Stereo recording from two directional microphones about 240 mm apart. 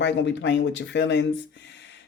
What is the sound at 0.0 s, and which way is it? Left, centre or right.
Speech, left.